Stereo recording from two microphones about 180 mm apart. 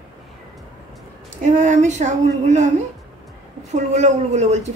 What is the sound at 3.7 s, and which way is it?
Speech, 40° right (ahead or behind).